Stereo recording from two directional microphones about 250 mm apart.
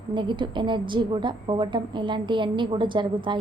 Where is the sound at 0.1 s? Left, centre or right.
Centre.